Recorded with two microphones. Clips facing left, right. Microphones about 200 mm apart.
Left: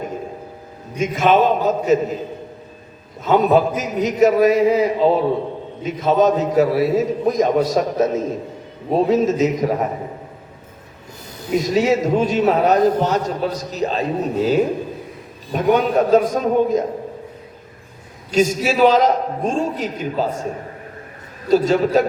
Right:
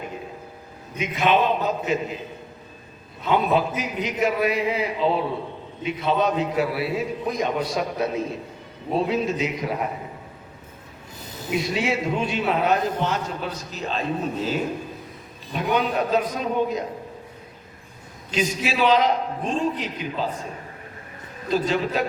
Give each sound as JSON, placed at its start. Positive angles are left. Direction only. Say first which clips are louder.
{"t": 0.9, "sound": "a man's voice", "louder": "left 5 dB", "side_deg": 45}
{"t": 3.2, "sound": "a man's voice", "louder": "left 6 dB", "side_deg": 45}
{"t": 11.5, "sound": "a man's voice", "louder": "left 8 dB", "side_deg": 40}
{"t": 18.3, "sound": "a man's voice", "louder": "left 8 dB", "side_deg": 45}
{"t": 21.5, "sound": "a man's voice", "louder": "left 8 dB", "side_deg": 45}